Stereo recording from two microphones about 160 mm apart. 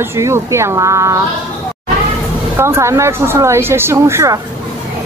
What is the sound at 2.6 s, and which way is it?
Speech, 15° right (ahead or behind).